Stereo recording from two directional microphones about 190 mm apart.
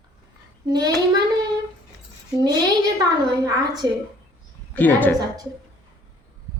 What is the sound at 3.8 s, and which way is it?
Speech, 15° right (ahead or behind).